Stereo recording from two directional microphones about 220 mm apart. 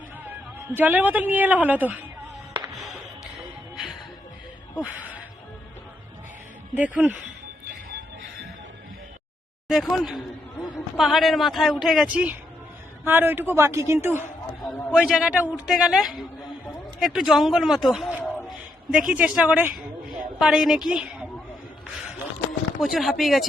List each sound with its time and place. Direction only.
0.3 s a woman's voice: 10° right (ahead or behind)
2.5 s music: 20° right (ahead or behind)
4.7 s speech: 5° right (ahead or behind)
6.7 s a man's voice: 5° right (ahead or behind)
9.6 s a woman's voice: centre (ahead or behind)
14.6 s a woman's voice: centre (ahead or behind)
18.2 s a sound: 10° left (ahead or behind)
18.9 s a woman's voice: 5° right (ahead or behind)
22.8 s a woman's voice: centre (ahead or behind)